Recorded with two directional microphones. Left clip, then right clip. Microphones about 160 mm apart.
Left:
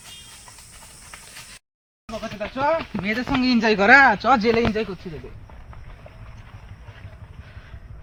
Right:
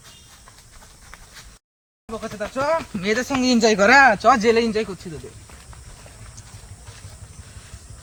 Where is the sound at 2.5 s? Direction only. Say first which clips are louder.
Even; 25° right (ahead or behind).